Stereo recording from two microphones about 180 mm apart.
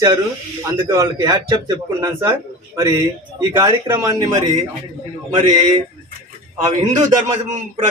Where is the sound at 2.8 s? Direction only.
20° right (ahead or behind).